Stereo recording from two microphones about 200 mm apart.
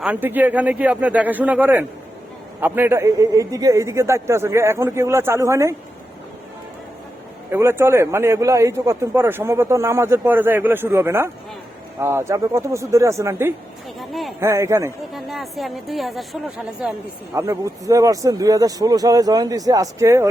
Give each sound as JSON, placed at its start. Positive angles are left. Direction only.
{"t": 0.0, "sound": "a man's voice", "side_deg": -10}
{"t": 7.5, "sound": "a man's voice", "side_deg": -10}
{"t": 14.0, "sound": "speech", "side_deg": 0}
{"t": 14.4, "sound": "a man's voice", "side_deg": -15}
{"t": 15.1, "sound": "a woman's voice", "side_deg": 0}
{"t": 17.3, "sound": "a man's voice", "side_deg": -15}